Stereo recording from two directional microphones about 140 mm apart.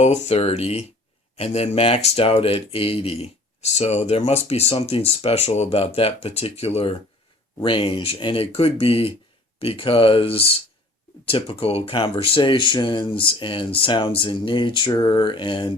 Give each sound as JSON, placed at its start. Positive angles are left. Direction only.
{"t": 0.0, "sound": "speech", "side_deg": 50}